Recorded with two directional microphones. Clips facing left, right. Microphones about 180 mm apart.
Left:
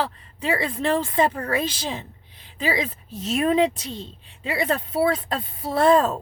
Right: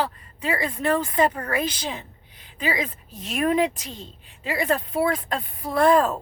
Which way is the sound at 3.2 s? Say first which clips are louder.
Left 2 dB; 25° left (ahead or behind).